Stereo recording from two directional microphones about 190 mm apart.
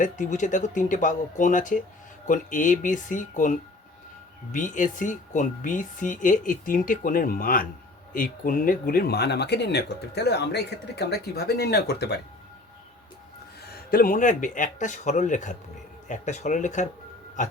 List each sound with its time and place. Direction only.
0.0 s speech: 40° left (ahead or behind); by 12.1 s 60° left (ahead or behind)
13.7 s speech: 50° left (ahead or behind)